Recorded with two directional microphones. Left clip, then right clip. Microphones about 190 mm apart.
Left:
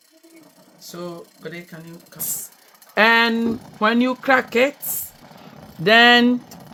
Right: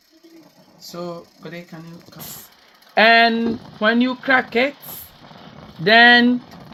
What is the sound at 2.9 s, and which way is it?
Speech, 20° left (ahead or behind).